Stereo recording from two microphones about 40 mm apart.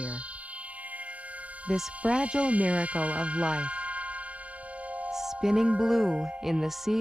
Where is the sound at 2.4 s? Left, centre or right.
Right.